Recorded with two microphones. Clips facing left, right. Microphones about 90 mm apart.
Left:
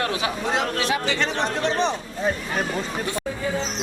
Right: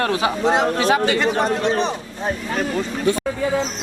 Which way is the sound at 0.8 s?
45° right (ahead or behind).